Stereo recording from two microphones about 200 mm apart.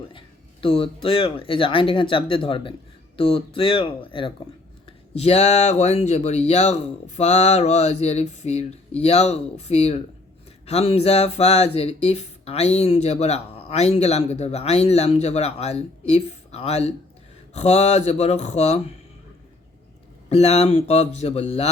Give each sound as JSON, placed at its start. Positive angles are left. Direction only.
{"t": 0.1, "sound": "speech", "side_deg": 25}
{"t": 20.3, "sound": "speech", "side_deg": 30}